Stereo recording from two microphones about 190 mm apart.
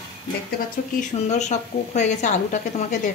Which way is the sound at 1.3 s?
35° left (ahead or behind).